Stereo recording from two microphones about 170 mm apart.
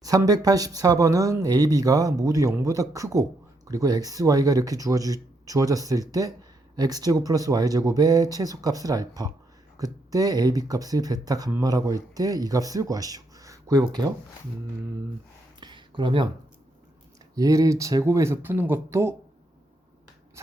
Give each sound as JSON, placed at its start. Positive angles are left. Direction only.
{"t": 0.0, "sound": "speech", "side_deg": -20}
{"t": 15.6, "sound": "a sound", "side_deg": -25}
{"t": 17.3, "sound": "speech", "side_deg": -20}